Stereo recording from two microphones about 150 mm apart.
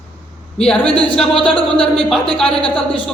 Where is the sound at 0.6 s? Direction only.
5° left (ahead or behind).